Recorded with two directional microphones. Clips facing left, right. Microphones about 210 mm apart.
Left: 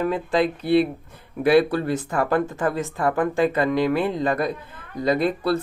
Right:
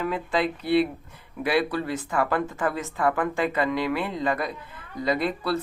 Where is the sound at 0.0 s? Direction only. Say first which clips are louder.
Left 4 dB; 40° left (ahead or behind).